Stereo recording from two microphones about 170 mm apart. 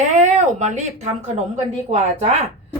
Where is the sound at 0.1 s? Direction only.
45° right (ahead or behind).